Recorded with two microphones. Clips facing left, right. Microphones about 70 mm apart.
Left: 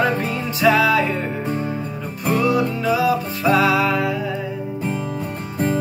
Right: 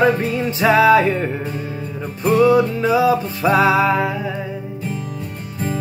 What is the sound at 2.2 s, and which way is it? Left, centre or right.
Music, right.